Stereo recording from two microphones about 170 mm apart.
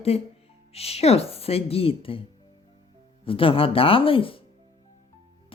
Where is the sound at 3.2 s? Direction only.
30° left (ahead or behind).